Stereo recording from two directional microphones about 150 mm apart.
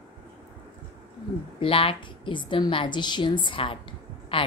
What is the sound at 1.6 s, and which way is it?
A woman's voice, 35° left (ahead or behind).